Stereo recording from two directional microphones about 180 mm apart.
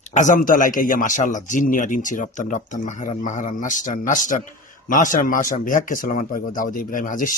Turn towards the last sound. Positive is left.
turn(degrees=50)  # may be behind; listen again after turning